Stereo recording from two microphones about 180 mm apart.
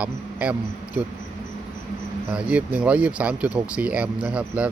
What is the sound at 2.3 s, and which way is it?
Speech, 5° right (ahead or behind).